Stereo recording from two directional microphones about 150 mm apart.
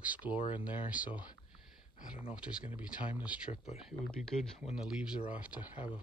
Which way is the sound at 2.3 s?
5° right (ahead or behind).